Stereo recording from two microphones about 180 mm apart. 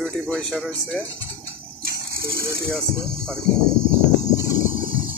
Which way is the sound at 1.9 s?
55° right (ahead or behind).